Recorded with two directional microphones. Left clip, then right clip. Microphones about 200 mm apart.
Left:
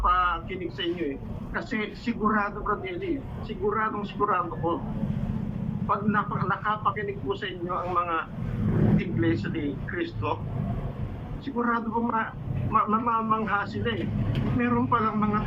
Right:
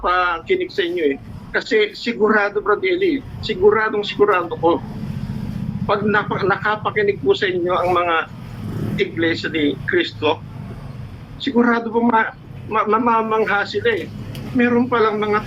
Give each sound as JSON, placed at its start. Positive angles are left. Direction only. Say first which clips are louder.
{"t": 0.0, "sound": "speech", "louder": "right 6 dB", "side_deg": -55}
{"t": 5.9, "sound": "speech", "louder": "right 9 dB", "side_deg": -50}
{"t": 11.4, "sound": "speech", "louder": "right 10 dB", "side_deg": -50}